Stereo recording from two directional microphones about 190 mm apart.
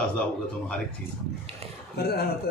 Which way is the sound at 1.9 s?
55° left (ahead or behind).